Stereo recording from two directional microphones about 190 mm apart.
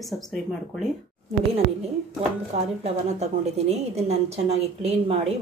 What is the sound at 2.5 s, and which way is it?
A woman's voice, 35° right (ahead or behind).